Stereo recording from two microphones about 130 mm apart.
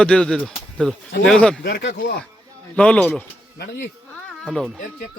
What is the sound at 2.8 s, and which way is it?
Speech, 10° left (ahead or behind).